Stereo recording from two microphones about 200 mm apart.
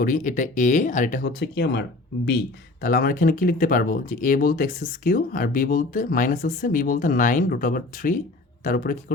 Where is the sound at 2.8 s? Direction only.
45° left (ahead or behind).